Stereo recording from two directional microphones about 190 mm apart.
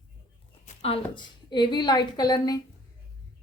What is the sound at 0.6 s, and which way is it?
A woman's voice, 30° left (ahead or behind).